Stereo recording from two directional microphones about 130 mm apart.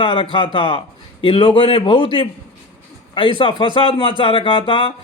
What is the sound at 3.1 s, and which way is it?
A man's voice, 40° left (ahead or behind).